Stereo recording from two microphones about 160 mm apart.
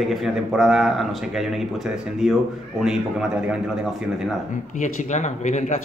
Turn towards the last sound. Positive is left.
turn(degrees=50)  # may be behind; listen again after turning